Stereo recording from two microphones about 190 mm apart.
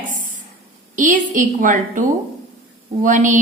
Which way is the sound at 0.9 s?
40° right (ahead or behind).